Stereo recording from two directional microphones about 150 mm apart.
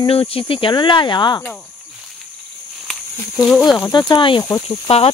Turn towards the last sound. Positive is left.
turn(degrees=40)  # may be behind; listen again after turning